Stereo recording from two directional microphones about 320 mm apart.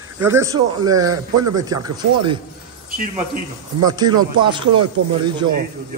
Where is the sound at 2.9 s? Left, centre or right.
Right.